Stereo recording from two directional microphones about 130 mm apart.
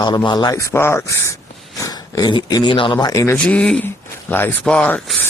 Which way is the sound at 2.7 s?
40° left (ahead or behind).